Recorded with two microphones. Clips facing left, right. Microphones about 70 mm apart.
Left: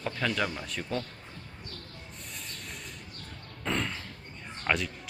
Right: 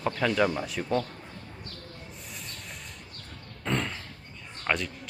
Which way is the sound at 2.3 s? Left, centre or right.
Centre.